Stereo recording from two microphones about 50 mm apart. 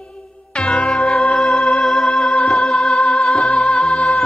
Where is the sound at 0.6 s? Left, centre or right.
Centre.